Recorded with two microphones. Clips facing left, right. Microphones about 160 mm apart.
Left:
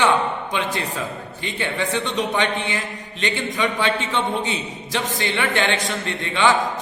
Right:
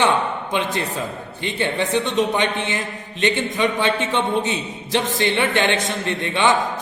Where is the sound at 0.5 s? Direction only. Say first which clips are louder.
Right 2 dB; 20° right (ahead or behind).